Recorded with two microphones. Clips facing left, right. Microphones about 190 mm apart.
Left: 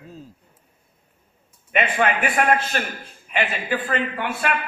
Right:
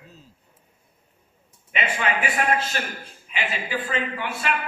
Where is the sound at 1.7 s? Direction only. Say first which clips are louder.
Left 5 dB; 55° left (ahead or behind).